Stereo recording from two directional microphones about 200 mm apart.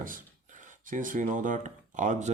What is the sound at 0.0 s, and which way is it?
Speech, 40° right (ahead or behind).